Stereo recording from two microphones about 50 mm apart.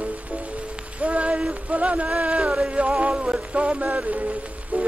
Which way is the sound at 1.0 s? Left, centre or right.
Right.